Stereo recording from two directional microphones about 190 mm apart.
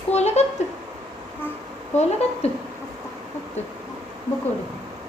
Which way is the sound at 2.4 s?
35° left (ahead or behind).